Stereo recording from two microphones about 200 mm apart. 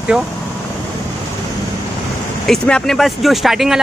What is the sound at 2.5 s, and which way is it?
Speech, 5° left (ahead or behind).